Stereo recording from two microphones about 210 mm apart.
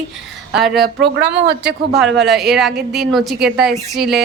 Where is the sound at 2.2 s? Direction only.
Centre (ahead or behind).